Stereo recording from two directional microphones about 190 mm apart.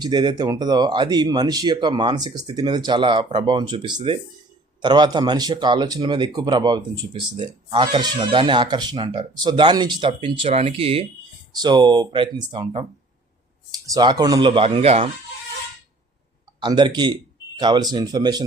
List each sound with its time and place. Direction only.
0.0 s speech: 20° right (ahead or behind)
16.6 s speech: 25° right (ahead or behind)